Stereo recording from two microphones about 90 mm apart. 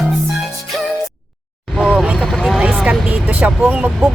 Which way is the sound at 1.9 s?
5° right (ahead or behind).